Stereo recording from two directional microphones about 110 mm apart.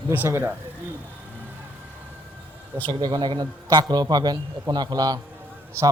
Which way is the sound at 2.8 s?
40° right (ahead or behind).